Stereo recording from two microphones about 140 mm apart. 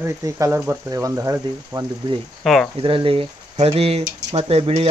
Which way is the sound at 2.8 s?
40° right (ahead or behind).